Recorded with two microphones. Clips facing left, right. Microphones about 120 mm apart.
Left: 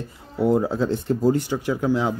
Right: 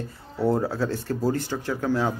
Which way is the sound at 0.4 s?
15° left (ahead or behind).